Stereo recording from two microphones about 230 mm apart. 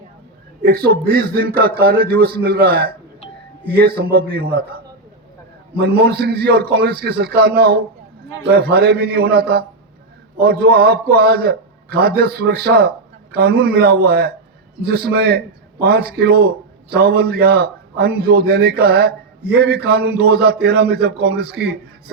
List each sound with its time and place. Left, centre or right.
0.6 s a man's voice: right
5.8 s a man's voice: right